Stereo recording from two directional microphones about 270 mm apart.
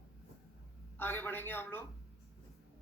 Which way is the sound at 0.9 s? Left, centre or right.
Centre.